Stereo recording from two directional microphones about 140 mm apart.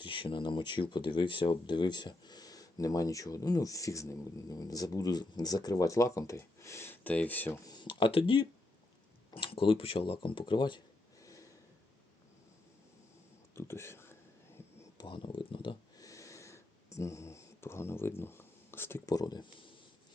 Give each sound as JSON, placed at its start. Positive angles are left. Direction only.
{"t": 0.0, "sound": "speech", "side_deg": 35}
{"t": 7.6, "sound": "speech", "side_deg": 30}
{"t": 11.2, "sound": "snort", "side_deg": 25}
{"t": 13.6, "sound": "speech", "side_deg": 20}
{"t": 14.8, "sound": "a sound", "side_deg": 30}
{"t": 16.0, "sound": "a sound", "side_deg": 25}